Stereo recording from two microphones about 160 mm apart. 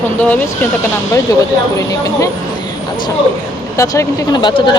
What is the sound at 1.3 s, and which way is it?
Speech, 20° left (ahead or behind).